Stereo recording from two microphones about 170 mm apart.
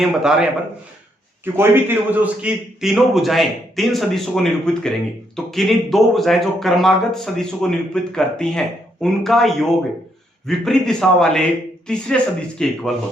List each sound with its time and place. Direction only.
0.0 s speech: 5° right (ahead or behind)
1.5 s speech: 15° right (ahead or behind); by 12.9 s 5° left (ahead or behind)